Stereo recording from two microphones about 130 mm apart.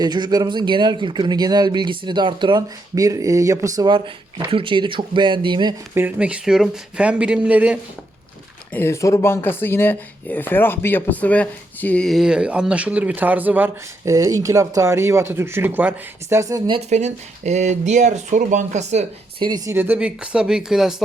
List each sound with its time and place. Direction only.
0.0 s speech: 30° right (ahead or behind)
3.8 s speech: 40° right (ahead or behind)
5.9 s speech: 15° right (ahead or behind)
8.7 s speech: 20° left (ahead or behind); by 14.1 s 15° right (ahead or behind)
14.1 s speech: 25° right (ahead or behind)
16.9 s speech: 60° right (ahead or behind)
19.4 s speech: 30° right (ahead or behind)
19.7 s speech: 15° right (ahead or behind)